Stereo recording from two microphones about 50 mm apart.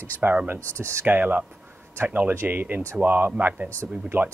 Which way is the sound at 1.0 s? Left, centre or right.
Right.